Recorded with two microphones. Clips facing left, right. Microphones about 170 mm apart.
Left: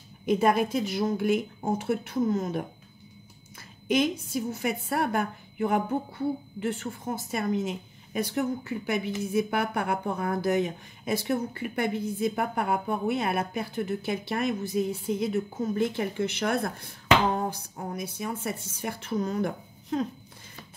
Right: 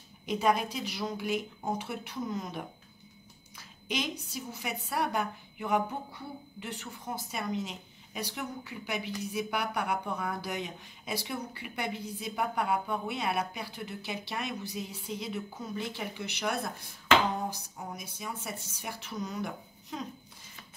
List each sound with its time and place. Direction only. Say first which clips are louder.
0.3 s speech: left 5 dB; 50° left (ahead or behind)
3.5 s a sound: left 10 dB; 50° left (ahead or behind)
4.3 s speech: left 9 dB; 50° left (ahead or behind)